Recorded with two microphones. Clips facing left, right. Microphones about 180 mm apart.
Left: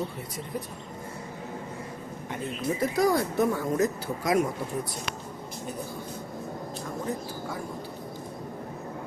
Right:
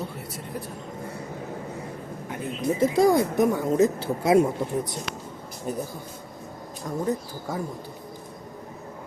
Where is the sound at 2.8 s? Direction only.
25° right (ahead or behind).